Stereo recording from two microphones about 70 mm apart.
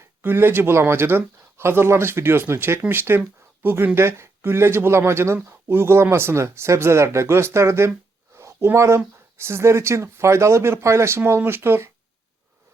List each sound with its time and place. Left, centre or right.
0.0 s speech: right
8.4 s a sound: right
9.4 s speech: right